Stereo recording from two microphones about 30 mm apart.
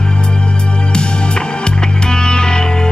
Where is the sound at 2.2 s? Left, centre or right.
Left.